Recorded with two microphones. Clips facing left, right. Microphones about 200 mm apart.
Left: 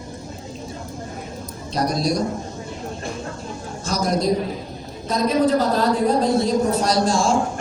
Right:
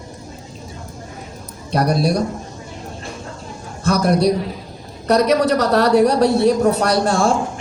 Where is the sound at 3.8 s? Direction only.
60° right (ahead or behind).